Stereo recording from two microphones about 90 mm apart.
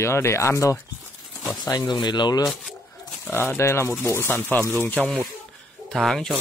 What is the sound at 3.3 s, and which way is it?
Speech, 25° left (ahead or behind).